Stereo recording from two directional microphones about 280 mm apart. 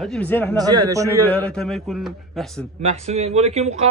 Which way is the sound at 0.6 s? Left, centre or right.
Centre.